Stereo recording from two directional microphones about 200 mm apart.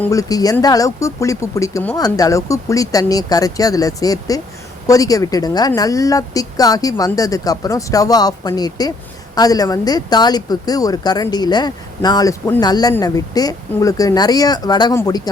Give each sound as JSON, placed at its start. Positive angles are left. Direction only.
{"t": 0.0, "sound": "a woman's voice", "side_deg": 15}